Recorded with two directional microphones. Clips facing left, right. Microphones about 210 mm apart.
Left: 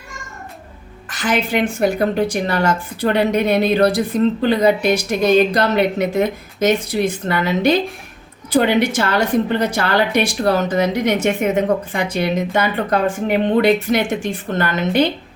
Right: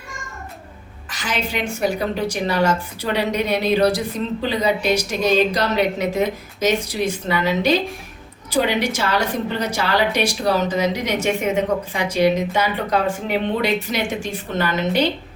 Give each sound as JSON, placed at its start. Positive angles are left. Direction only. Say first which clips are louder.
{"t": 1.1, "sound": "speech", "louder": "left 6 dB", "side_deg": 55}